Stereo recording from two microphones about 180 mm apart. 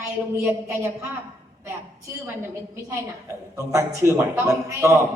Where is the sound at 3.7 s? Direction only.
15° right (ahead or behind).